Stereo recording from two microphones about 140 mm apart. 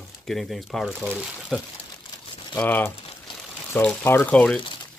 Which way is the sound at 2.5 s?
10° left (ahead or behind).